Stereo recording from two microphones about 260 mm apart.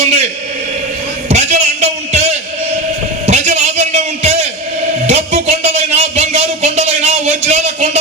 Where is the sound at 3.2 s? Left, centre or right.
Right.